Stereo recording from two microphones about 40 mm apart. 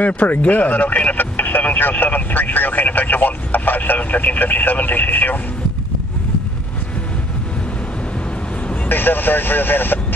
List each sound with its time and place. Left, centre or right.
0.0 s speech: left
8.8 s speech: left